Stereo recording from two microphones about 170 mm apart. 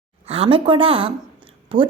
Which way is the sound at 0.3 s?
35° right (ahead or behind).